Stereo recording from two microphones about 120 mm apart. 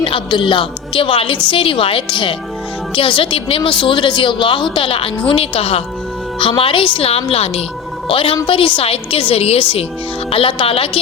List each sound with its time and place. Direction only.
0.0 s a woman's voice: 45° left (ahead or behind)